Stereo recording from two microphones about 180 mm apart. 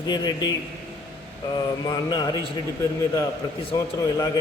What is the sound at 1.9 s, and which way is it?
Speech, 25° left (ahead or behind).